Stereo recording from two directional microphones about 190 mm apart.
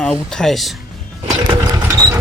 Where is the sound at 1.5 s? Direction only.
20° right (ahead or behind).